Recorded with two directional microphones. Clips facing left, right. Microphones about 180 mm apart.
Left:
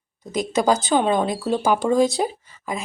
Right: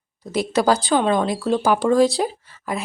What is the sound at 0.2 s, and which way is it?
Speech, 15° left (ahead or behind).